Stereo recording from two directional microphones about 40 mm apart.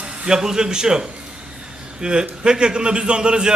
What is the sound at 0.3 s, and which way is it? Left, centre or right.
A man's voice, centre.